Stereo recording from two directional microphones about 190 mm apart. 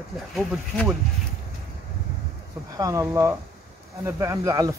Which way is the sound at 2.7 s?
15° right (ahead or behind).